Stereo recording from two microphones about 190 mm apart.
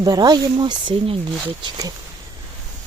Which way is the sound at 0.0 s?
20° right (ahead or behind).